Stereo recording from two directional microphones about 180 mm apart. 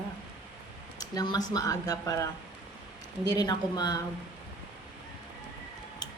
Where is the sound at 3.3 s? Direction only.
20° left (ahead or behind).